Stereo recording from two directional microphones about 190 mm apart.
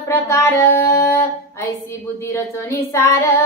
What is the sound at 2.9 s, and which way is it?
Child singing, 15° left (ahead or behind).